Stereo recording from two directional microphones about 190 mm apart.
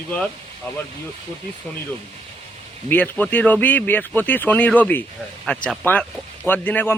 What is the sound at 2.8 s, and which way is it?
Speech, 10° left (ahead or behind).